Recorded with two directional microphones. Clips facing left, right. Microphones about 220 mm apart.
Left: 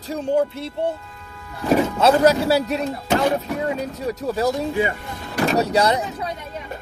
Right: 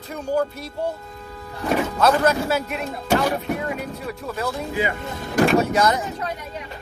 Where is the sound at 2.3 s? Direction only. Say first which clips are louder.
Left 4 dB; 35° left (ahead or behind).